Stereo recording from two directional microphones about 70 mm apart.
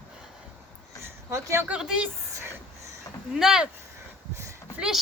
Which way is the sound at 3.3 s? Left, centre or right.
Centre.